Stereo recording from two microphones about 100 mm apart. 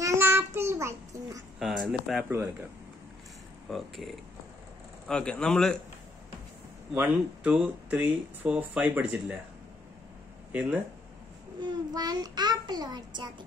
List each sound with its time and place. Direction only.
0.0 s child singing: 25° right (ahead or behind)
1.6 s speech: 5° right (ahead or behind)
3.7 s speech: centre (ahead or behind)
6.9 s speech: 15° right (ahead or behind)
11.6 s a child's voice: 40° right (ahead or behind)